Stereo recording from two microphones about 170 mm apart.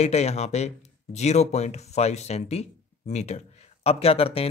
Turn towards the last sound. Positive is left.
turn(degrees=35)  # may be behind; listen again after turning